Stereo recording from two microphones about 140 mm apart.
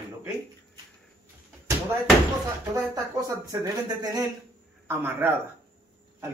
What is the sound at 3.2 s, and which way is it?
Speech, 25° right (ahead or behind).